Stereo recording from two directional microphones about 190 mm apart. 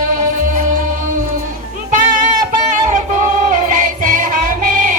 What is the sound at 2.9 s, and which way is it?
Music, 40° right (ahead or behind).